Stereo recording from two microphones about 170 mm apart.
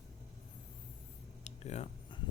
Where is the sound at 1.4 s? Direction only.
40° left (ahead or behind).